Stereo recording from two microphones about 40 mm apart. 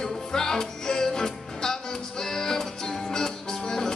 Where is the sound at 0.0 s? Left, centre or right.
Centre.